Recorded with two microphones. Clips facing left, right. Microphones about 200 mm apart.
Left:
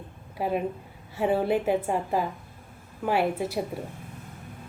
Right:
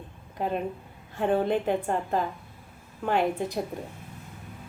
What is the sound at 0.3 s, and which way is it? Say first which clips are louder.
A woman's voice: left 2 dB; 10° left (ahead or behind).